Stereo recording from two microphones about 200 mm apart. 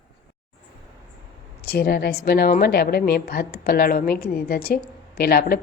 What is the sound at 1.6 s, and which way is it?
A woman's voice, 50° left (ahead or behind).